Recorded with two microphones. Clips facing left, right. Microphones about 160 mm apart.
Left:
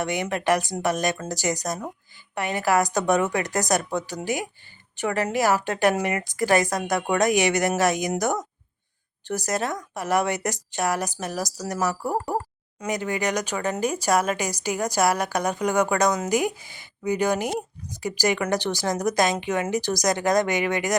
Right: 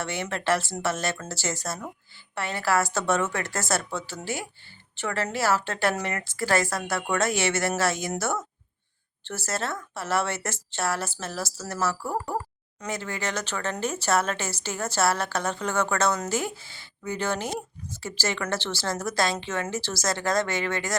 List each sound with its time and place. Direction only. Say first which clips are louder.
0.0 s speech: left 4 dB; 15° left (ahead or behind)